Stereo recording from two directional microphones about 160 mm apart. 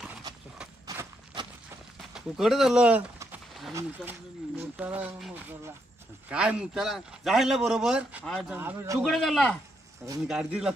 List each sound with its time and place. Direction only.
0.9 s horse: 25° right (ahead or behind)
2.1 s a man's voice: centre (ahead or behind)
3.7 s a man's voice: 15° right (ahead or behind); by 8.5 s centre (ahead or behind)
8.5 s speech: 15° right (ahead or behind)
9.0 s a man's voice: centre (ahead or behind)